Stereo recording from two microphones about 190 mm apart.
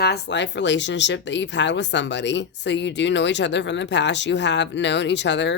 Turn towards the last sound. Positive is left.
turn(degrees=65)  # may be behind; listen again after turning